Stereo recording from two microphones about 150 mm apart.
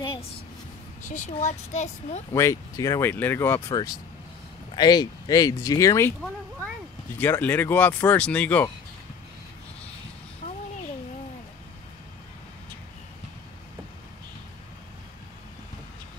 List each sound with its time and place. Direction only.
1.0 s speech: 55° left (ahead or behind)
2.3 s speech: 20° left (ahead or behind)
7.2 s speech: 15° left (ahead or behind)